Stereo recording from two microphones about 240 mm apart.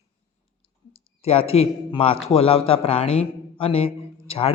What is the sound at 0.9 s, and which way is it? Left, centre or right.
A man's voice, left.